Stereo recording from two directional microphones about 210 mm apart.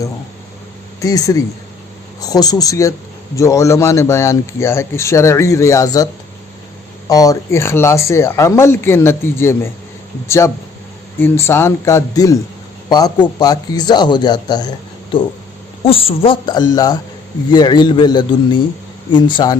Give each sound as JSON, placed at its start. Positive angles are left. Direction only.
{"t": 1.0, "sound": "a man's voice", "side_deg": 15}
{"t": 7.1, "sound": "a man's voice", "side_deg": 15}
{"t": 15.8, "sound": "a man's voice", "side_deg": 25}